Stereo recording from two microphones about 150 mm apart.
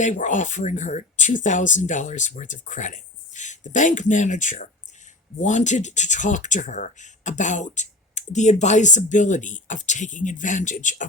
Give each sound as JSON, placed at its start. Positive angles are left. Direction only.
{"t": 0.0, "sound": "speech", "side_deg": 55}